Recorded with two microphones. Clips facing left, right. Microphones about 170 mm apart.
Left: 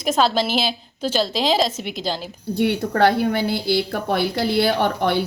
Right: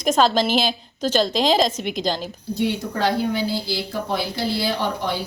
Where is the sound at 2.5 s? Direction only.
60° left (ahead or behind).